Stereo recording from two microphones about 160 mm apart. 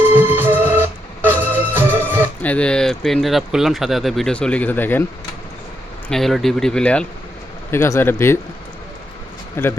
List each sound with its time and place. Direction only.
0.1 s organ: 10° right (ahead or behind)
2.4 s speech: 10° left (ahead or behind)
6.1 s a man's voice: centre (ahead or behind)
9.6 s a man's voice: 15° left (ahead or behind)